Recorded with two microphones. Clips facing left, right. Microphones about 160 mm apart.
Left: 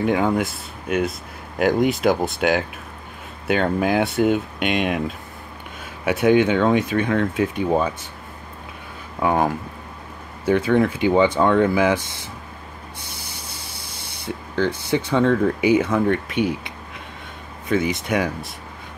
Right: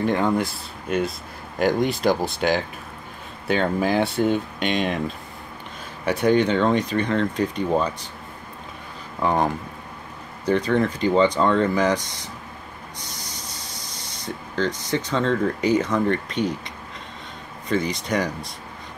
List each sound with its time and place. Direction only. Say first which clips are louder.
0.0 s speech: left 2 dB; 5° left (ahead or behind)
9.2 s speech: left 2 dB; 10° left (ahead or behind)
14.2 s speech: left 3 dB; 10° left (ahead or behind)
17.6 s speech: left 2 dB; 5° left (ahead or behind)